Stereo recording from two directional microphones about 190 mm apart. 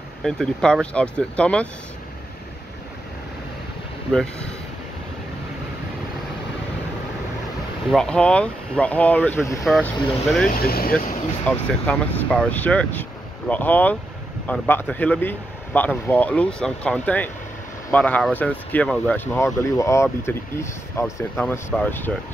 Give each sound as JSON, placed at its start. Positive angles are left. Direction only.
{"t": 0.2, "sound": "speech", "side_deg": 5}
{"t": 4.1, "sound": "speech", "side_deg": 0}
{"t": 7.9, "sound": "speech", "side_deg": 5}
{"t": 10.5, "sound": "speech", "side_deg": 50}
{"t": 11.4, "sound": "speech", "side_deg": 5}